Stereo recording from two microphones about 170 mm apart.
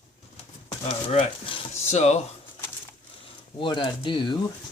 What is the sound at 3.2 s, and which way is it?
Speech, 30° left (ahead or behind).